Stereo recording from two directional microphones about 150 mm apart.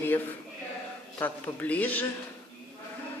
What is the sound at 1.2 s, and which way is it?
Speech, 10° left (ahead or behind).